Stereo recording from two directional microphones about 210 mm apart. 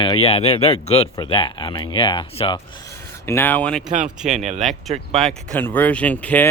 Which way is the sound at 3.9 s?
35° right (ahead or behind).